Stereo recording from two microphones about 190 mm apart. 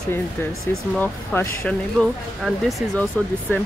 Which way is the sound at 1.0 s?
10° left (ahead or behind).